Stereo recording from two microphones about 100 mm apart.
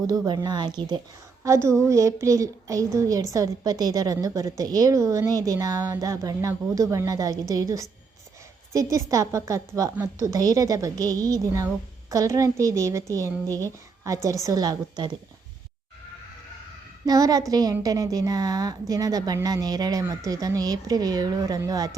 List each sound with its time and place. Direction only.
0.1 s speech: 45° right (ahead or behind)
1.5 s a woman's voice: 30° right (ahead or behind); by 15.1 s 45° right (ahead or behind)
17.1 s a woman's voice: 40° right (ahead or behind)